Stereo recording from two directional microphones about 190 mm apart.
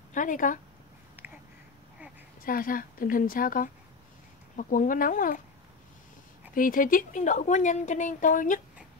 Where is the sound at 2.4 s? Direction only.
50° left (ahead or behind).